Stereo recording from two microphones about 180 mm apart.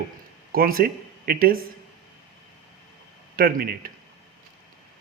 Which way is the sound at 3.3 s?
55° right (ahead or behind).